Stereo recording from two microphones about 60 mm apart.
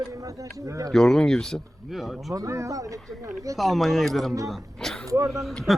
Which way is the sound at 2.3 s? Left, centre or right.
Right.